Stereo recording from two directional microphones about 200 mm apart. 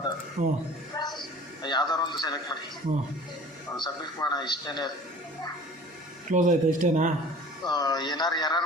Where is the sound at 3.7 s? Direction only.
20° left (ahead or behind).